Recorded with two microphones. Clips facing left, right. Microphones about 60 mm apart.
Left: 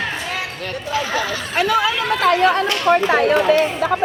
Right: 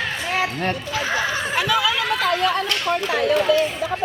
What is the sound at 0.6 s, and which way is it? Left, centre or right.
Speech, right.